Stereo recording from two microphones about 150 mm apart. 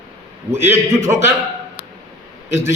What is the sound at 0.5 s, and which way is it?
Speech, 15° right (ahead or behind).